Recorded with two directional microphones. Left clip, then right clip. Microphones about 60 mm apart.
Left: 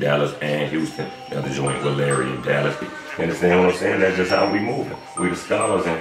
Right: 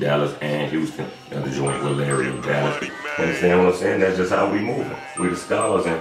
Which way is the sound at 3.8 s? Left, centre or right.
Centre.